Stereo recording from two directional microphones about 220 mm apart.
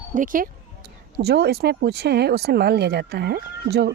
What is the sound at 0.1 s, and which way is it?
Speech, 35° right (ahead or behind).